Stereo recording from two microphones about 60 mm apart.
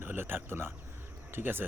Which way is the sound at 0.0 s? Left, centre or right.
Right.